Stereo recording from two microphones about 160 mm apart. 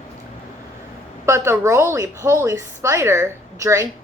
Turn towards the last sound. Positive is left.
turn(degrees=-15)  # may be behind; listen again after turning